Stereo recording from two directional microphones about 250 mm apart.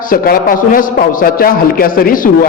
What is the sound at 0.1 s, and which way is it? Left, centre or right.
A man's voice, left.